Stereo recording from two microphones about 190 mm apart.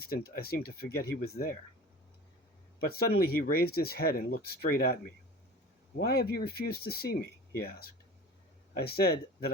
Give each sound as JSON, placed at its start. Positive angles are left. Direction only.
{"t": 0.0, "sound": "speech", "side_deg": 55}
{"t": 2.8, "sound": "speech", "side_deg": 55}
{"t": 6.1, "sound": "speech", "side_deg": 55}